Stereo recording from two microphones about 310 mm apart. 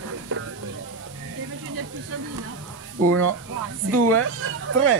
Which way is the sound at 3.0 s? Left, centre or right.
Right.